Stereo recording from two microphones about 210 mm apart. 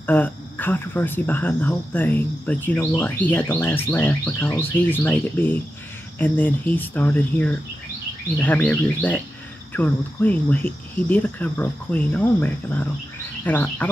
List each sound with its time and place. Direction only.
0.0 s speech: 10° left (ahead or behind)